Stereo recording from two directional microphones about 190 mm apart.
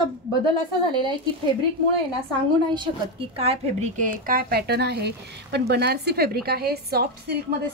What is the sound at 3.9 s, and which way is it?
Speech, 45° right (ahead or behind).